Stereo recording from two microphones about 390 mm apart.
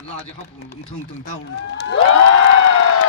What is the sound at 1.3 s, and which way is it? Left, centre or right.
Speech, left.